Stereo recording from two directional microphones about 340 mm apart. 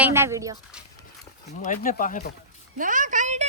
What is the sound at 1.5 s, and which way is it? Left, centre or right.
Speech, left.